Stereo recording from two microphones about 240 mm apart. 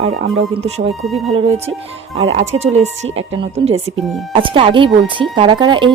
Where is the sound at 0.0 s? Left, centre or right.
Right.